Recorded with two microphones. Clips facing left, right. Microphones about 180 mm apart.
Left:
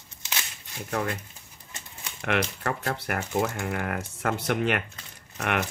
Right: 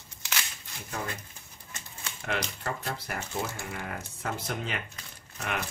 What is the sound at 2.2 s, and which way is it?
Speech, 70° left (ahead or behind).